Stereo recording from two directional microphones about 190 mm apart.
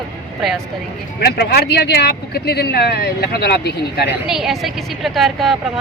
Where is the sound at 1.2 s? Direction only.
60° left (ahead or behind).